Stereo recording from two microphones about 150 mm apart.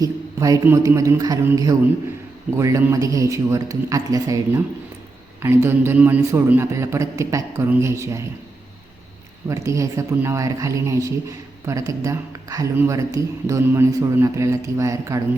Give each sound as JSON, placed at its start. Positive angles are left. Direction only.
{"t": 0.0, "sound": "a man's voice", "side_deg": -25}
{"t": 9.5, "sound": "speech", "side_deg": -20}